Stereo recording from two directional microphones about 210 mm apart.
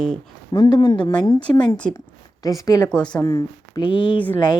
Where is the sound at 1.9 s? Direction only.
15° left (ahead or behind).